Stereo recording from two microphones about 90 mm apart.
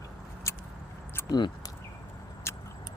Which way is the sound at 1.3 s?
45° left (ahead or behind).